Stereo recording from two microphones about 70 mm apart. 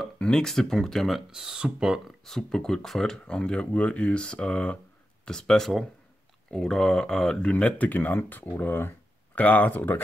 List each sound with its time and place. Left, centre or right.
0.2 s speech: centre
1.3 s speech: centre
2.2 s speech: centre; by 10.0 s left